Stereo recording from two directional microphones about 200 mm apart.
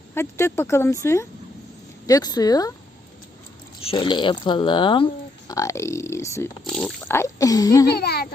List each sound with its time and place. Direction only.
0.1 s speech: 10° left (ahead or behind)
3.8 s speech: 25° left (ahead or behind)
6.7 s speech: 5° left (ahead or behind)
7.9 s a child's voice: 55° left (ahead or behind)